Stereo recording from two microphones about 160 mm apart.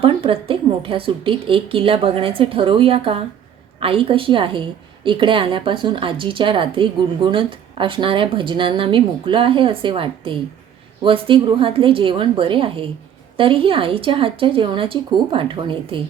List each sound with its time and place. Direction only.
0.0 s a woman's voice: 35° right (ahead or behind)